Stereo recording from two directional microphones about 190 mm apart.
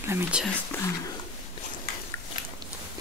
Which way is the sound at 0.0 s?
10° right (ahead or behind).